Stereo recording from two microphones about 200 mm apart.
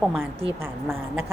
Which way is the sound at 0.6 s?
10° right (ahead or behind).